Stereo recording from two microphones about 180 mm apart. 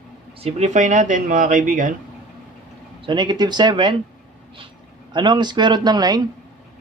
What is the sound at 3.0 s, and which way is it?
Speech, 25° right (ahead or behind).